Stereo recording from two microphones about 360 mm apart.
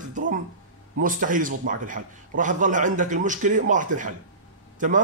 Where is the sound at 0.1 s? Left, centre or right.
Right.